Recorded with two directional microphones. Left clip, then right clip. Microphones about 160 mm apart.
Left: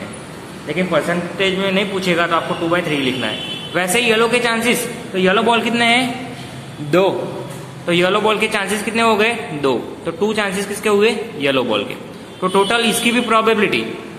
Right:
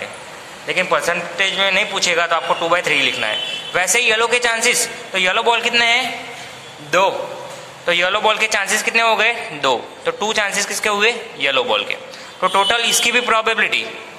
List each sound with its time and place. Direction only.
1.4 s a man's voice: 35° right (ahead or behind)
5.5 s speech: 10° right (ahead or behind)
7.8 s a man's voice: 25° right (ahead or behind)